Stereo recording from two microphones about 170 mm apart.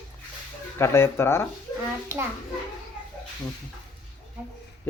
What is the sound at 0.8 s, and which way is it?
Speech, 15° left (ahead or behind).